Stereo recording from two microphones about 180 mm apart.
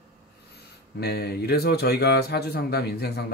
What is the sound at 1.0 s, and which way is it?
Speech, 65° left (ahead or behind).